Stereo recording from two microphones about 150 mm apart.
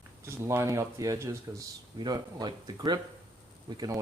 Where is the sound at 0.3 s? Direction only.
20° right (ahead or behind).